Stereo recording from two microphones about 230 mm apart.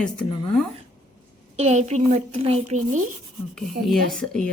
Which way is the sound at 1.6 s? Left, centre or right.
Right.